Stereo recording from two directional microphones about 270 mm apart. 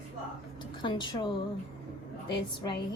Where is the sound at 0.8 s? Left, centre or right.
Centre.